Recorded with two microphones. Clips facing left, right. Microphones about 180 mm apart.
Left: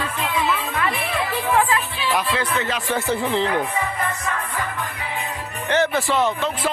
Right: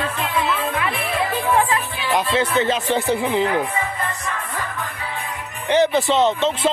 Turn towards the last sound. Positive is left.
turn(degrees=-25)  # may be behind; listen again after turning